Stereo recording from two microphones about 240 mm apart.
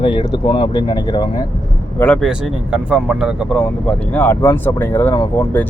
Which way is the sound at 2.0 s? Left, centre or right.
Centre.